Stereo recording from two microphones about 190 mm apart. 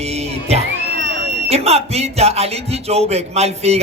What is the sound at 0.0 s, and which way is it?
Crowd, 35° right (ahead or behind).